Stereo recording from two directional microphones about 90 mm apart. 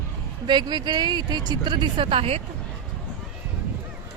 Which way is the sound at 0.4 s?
55° right (ahead or behind).